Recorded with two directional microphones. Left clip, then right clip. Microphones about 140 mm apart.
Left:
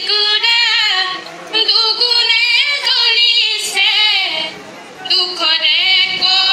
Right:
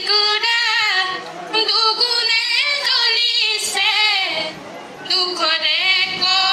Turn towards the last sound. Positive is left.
turn(degrees=-45)  # may be behind; listen again after turning